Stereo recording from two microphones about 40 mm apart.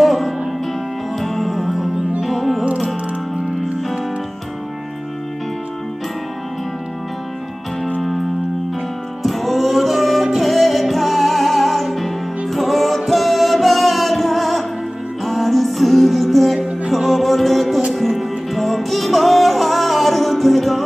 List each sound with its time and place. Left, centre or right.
0.0 s music: centre
9.2 s music: centre